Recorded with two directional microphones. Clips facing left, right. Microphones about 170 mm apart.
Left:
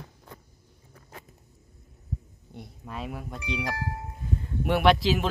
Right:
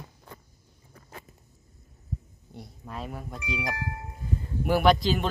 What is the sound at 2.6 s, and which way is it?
Speech, centre (ahead or behind).